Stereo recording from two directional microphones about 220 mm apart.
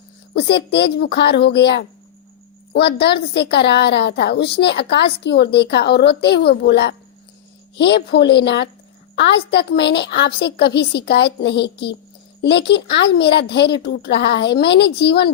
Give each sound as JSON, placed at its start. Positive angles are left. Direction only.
{"t": 0.3, "sound": "a woman's voice", "side_deg": 50}